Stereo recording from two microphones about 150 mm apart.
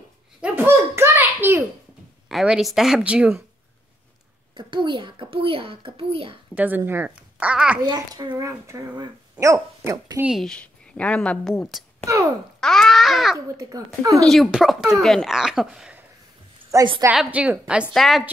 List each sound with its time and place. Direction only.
0.4 s a sound: 15° right (ahead or behind)
2.2 s speech: centre (ahead or behind)
4.6 s a child's voice: 30° right (ahead or behind)
6.5 s speech: 10° right (ahead or behind)
7.8 s speech: 25° right (ahead or behind)
10.2 s speech: centre (ahead or behind)
12.5 s babbling: 5° left (ahead or behind)
13.6 s speech: 20° right (ahead or behind)
14.2 s speech: centre (ahead or behind)
16.7 s a child's voice: 30° right (ahead or behind)
17.1 s speech: 5° right (ahead or behind)